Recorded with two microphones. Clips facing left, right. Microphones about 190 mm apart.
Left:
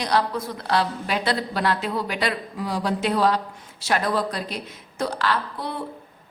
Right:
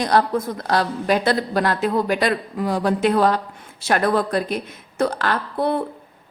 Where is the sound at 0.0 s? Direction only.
50° right (ahead or behind).